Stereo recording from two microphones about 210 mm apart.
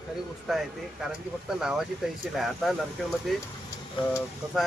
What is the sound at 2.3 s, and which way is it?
Speech, centre (ahead or behind).